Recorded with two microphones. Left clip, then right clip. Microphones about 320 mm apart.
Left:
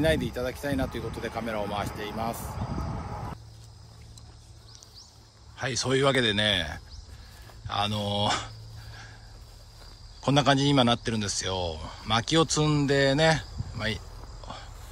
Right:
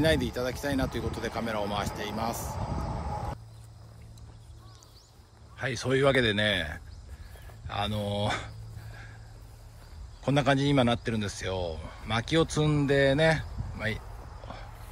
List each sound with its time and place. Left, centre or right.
0.0 s speech: centre
2.4 s vehicle: right
5.6 s speech: centre
7.6 s a sound: centre
10.2 s speech: centre
14.5 s a sound: centre